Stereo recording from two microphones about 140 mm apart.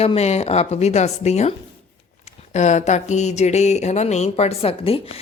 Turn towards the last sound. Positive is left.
turn(degrees=45)  # may be behind; listen again after turning